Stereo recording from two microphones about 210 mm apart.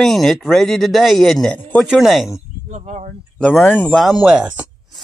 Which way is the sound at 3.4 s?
5° left (ahead or behind).